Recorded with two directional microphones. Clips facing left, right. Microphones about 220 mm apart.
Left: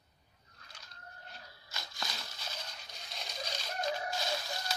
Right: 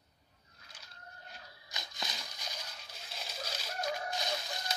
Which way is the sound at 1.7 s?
20° right (ahead or behind).